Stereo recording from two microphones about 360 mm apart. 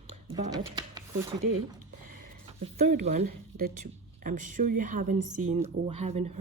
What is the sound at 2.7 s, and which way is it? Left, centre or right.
Speech, centre.